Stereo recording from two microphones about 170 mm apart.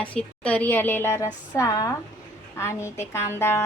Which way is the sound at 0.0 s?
5° left (ahead or behind).